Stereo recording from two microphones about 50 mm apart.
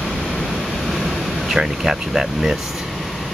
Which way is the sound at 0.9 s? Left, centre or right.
Centre.